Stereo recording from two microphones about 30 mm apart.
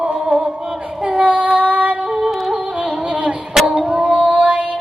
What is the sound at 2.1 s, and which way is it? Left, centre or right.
Music, right.